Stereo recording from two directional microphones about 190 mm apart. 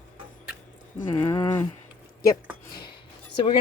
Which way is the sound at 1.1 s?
15° left (ahead or behind).